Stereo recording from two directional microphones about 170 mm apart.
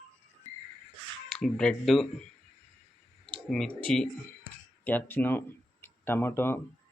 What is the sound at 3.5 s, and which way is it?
Speech, 5° left (ahead or behind).